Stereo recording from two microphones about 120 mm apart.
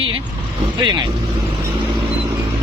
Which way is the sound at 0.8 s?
40° right (ahead or behind).